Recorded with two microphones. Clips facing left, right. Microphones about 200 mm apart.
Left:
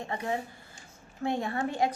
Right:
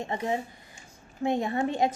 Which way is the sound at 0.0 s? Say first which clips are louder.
Right 3 dB; 20° right (ahead or behind).